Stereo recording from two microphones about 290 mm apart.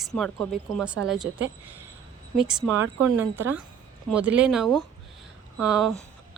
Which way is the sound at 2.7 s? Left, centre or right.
Right.